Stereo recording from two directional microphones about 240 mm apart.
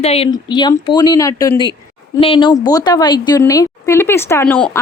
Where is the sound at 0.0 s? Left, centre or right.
Left.